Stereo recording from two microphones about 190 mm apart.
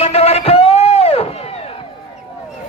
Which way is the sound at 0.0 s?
35° left (ahead or behind).